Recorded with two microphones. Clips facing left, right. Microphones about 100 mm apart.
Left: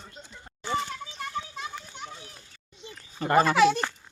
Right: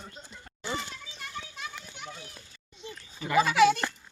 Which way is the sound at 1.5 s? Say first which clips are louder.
Left 4 dB; 35° left (ahead or behind).